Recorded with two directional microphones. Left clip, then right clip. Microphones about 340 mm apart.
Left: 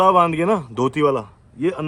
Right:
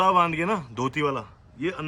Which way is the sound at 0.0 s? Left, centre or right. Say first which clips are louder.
Left 6 dB; centre.